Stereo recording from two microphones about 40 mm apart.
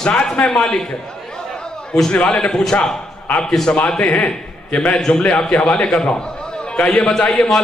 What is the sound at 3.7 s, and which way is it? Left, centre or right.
A man's voice, left.